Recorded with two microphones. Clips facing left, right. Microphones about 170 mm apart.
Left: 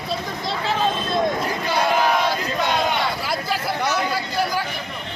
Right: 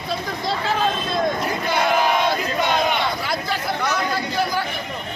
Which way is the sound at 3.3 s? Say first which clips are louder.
Even; 5° left (ahead or behind).